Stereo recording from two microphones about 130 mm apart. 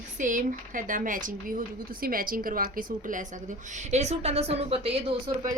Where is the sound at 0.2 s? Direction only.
80° right.